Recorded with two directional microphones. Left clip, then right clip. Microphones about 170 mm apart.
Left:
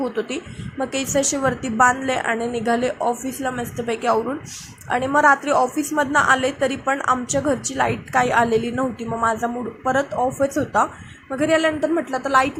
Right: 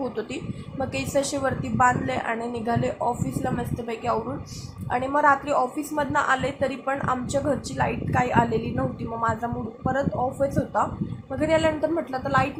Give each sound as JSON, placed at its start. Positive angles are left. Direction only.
{"t": 0.0, "sound": "a woman's voice", "side_deg": 15}